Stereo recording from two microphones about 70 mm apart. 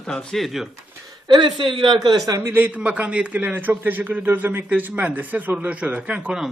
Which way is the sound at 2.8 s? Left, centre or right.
Centre.